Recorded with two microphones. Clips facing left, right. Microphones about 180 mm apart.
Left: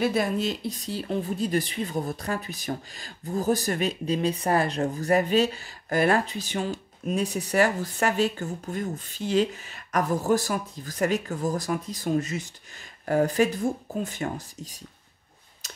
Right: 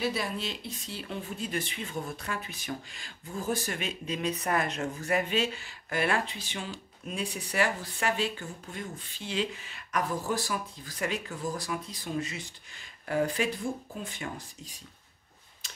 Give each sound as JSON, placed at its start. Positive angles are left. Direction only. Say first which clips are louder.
{"t": 0.0, "sound": "speech", "louder": "left 7 dB", "side_deg": 50}
{"t": 15.6, "sound": "tick-tock", "louder": "left 5 dB", "side_deg": 40}